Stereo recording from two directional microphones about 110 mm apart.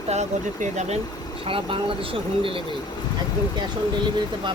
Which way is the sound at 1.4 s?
55° right (ahead or behind).